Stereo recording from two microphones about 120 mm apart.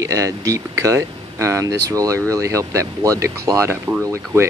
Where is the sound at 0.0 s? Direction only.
25° right (ahead or behind).